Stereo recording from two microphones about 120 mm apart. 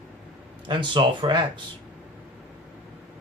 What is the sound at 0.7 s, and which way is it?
Speech, 40° right (ahead or behind).